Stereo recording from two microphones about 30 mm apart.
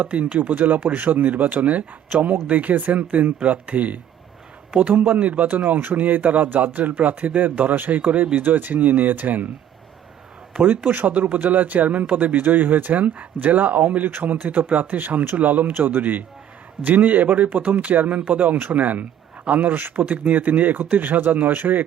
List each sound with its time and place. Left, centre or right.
0.0 s a man's voice: right
1.6 s a man's voice: right
2.7 s speech: right
3.2 s a man's voice: right
8.4 s speech: right
10.8 s a man's voice: right
11.3 s speech: right
16.8 s a man's voice: right